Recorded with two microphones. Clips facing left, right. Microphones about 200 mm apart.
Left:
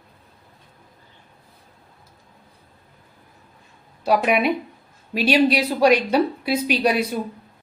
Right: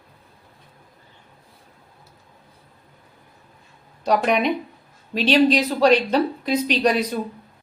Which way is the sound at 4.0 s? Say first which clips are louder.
Left 1 dB; 5° left (ahead or behind).